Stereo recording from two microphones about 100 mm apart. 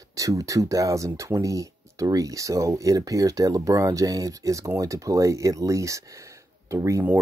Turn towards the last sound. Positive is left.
turn(degrees=-30)  # may be behind; listen again after turning